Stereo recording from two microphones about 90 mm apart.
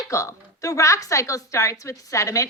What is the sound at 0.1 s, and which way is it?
A woman's voice, 35° left (ahead or behind).